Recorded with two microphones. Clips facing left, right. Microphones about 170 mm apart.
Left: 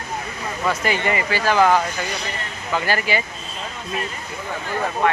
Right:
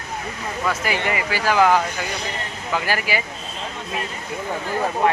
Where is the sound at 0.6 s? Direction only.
5° right (ahead or behind).